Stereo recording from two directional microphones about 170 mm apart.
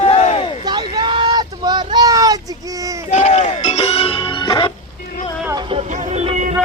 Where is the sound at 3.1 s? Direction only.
40° left (ahead or behind).